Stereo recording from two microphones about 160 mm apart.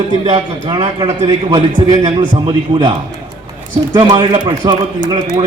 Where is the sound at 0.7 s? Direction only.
25° right (ahead or behind).